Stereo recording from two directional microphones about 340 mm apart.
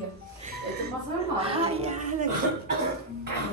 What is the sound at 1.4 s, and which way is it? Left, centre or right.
Speech, centre.